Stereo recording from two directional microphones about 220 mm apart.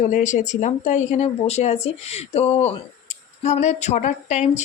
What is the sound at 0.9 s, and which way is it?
Speech, 30° left (ahead or behind).